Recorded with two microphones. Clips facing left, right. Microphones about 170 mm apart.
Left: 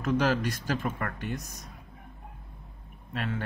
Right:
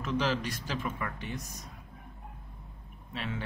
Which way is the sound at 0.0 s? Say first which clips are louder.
Left 4 dB; 50° left (ahead or behind).